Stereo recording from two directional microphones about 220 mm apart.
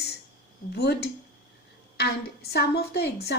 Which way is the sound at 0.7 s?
50° left (ahead or behind).